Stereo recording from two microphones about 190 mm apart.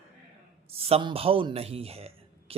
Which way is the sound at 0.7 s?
30° right (ahead or behind).